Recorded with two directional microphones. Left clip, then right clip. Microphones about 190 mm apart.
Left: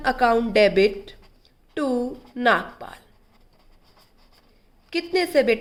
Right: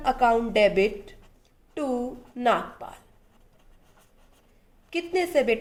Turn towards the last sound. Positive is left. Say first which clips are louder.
# left 3 dB
turn(degrees=30)  # may be behind; listen again after turning